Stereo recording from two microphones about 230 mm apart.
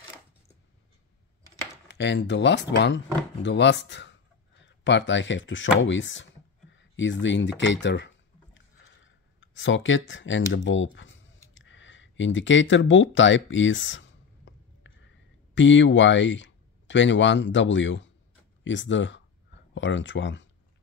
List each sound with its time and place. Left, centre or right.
1.9 s speech: left
8.5 s a sound: left
15.5 s speech: left